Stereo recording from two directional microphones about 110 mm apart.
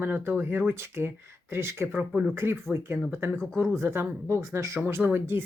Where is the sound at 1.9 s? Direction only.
10° right (ahead or behind).